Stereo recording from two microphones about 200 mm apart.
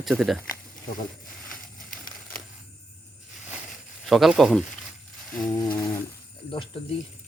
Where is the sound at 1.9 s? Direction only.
45° left (ahead or behind).